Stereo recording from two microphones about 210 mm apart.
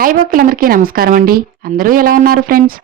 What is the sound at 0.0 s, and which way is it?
A woman's voice, 40° right (ahead or behind).